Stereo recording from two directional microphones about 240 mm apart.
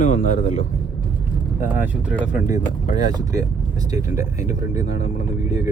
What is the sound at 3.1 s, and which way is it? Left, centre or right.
Speech, centre.